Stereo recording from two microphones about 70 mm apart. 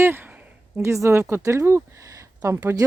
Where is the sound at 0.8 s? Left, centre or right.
Right.